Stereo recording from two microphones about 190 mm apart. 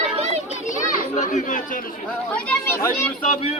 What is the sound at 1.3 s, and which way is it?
Speech, 40° left (ahead or behind).